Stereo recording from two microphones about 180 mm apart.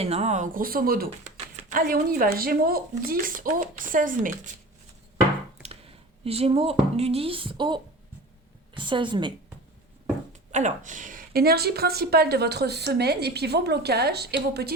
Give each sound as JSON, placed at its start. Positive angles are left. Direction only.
{"t": 0.0, "sound": "speech", "side_deg": -35}
{"t": 6.2, "sound": "speech", "side_deg": -35}
{"t": 10.5, "sound": "speech", "side_deg": -40}